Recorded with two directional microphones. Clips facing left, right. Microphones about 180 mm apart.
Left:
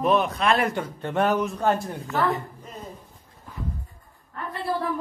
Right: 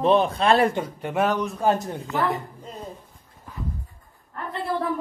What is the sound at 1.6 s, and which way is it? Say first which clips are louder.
Speech: right 1 dB; 20° right (ahead or behind).